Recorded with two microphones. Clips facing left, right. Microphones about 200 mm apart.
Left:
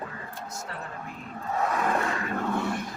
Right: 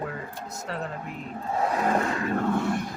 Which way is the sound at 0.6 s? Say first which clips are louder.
Right 9 dB; 75° right (ahead or behind).